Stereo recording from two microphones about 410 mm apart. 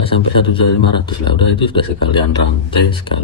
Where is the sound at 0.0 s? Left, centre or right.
Centre.